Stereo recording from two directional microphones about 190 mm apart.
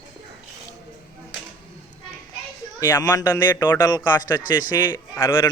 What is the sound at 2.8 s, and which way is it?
A man's voice, 15° left (ahead or behind).